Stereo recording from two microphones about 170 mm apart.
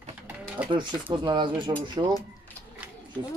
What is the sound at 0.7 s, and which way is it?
Speech, 25° right (ahead or behind).